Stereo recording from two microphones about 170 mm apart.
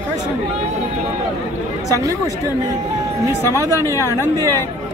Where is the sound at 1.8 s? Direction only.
20° right (ahead or behind).